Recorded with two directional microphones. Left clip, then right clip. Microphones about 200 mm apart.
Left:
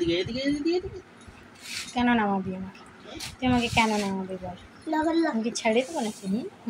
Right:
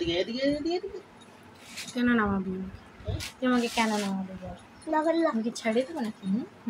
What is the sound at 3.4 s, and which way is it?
A woman's voice, centre (ahead or behind).